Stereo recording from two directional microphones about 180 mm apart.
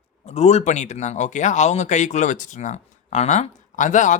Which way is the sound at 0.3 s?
35° left (ahead or behind).